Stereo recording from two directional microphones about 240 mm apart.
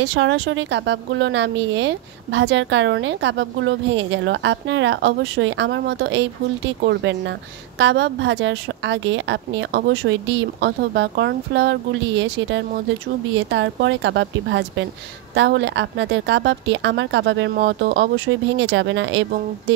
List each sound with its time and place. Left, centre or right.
0.0 s speech: right